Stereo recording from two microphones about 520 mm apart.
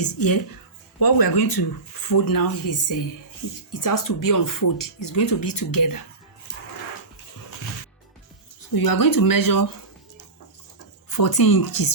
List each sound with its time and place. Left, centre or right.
0.0 s speech: left
8.7 s speech: left
11.2 s speech: left